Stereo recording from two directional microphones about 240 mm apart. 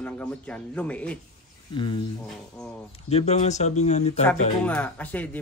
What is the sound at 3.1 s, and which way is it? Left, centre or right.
Speech, left.